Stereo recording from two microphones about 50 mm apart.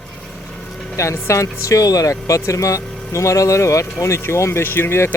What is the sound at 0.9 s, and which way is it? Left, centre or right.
Speech, left.